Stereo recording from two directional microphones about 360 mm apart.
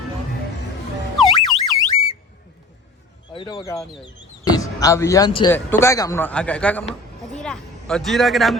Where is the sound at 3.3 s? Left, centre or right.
Centre.